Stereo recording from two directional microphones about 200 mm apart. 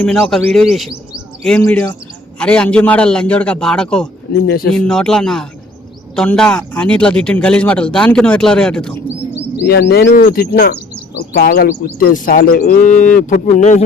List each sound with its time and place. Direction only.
0.0 s speech: 5° left (ahead or behind)
4.3 s speech: 50° left (ahead or behind)
4.7 s speech: 5° left (ahead or behind)
9.6 s speech: 50° left (ahead or behind); by 13.8 s 35° left (ahead or behind)